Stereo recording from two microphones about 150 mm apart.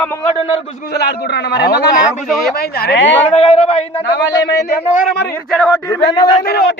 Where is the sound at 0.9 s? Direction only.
90° left.